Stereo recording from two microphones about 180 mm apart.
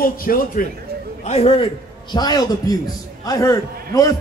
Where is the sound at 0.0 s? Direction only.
55° left (ahead or behind).